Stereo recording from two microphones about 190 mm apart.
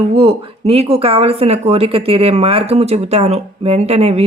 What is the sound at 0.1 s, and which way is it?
Speech, 30° right (ahead or behind).